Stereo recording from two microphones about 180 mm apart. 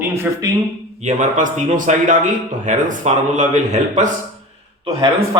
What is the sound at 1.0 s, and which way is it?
A man's voice, 40° right (ahead or behind).